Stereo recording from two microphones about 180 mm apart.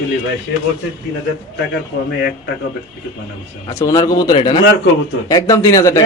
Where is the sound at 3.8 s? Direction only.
20° left (ahead or behind).